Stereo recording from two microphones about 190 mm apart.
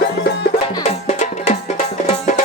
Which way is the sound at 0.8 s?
35° left (ahead or behind).